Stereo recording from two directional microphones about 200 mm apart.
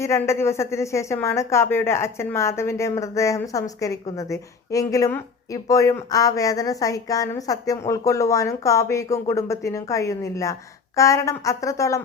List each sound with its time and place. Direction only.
0.0 s a woman's voice: 15° left (ahead or behind)